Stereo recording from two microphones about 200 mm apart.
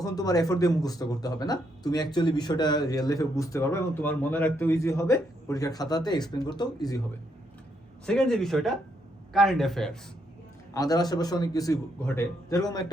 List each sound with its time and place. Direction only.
0.0 s a man's voice: 20° left (ahead or behind)
8.0 s speech: 5° left (ahead or behind)
10.8 s a man's voice: 20° left (ahead or behind)